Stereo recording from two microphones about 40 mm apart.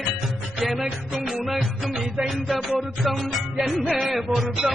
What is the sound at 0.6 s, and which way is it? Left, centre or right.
Music, centre.